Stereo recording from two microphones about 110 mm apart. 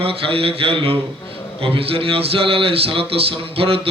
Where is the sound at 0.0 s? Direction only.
60° right (ahead or behind).